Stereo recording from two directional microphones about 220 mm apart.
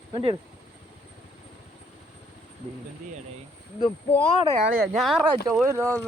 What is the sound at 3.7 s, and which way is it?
Speech, 25° left (ahead or behind).